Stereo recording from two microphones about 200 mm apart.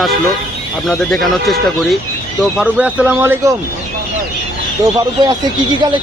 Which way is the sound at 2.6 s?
5° right (ahead or behind).